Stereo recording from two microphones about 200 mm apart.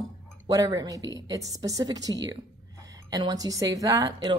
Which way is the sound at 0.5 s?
15° right (ahead or behind).